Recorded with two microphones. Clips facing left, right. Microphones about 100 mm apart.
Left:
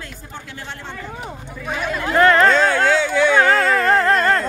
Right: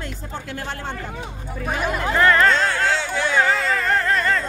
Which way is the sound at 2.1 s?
25° left (ahead or behind).